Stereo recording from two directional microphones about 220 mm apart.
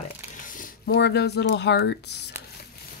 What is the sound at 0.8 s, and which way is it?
Speech, 50° left (ahead or behind).